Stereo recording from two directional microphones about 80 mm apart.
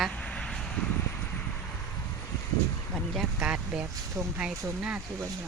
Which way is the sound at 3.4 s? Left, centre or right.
Centre.